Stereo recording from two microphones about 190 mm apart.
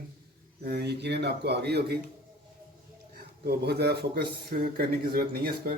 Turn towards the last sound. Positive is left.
turn(degrees=-55)  # may be behind; listen again after turning